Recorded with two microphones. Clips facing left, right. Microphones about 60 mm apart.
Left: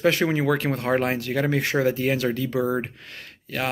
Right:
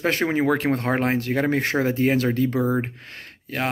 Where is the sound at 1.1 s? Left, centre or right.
Right.